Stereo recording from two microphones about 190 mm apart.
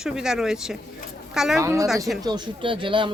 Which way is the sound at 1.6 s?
15° right (ahead or behind).